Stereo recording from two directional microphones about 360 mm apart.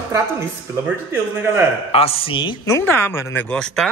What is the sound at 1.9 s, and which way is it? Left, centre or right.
Speech, centre.